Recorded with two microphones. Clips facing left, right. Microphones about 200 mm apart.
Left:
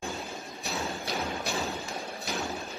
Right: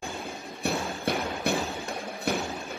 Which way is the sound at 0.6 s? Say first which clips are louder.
Right 6 dB; 55° right (ahead or behind).